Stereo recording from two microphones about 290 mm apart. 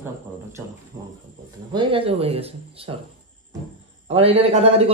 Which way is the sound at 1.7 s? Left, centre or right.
Centre.